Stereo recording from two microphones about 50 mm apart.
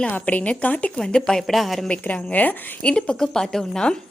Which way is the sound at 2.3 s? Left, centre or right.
Left.